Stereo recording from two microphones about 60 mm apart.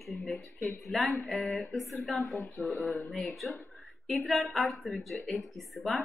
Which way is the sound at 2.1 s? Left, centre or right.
Left.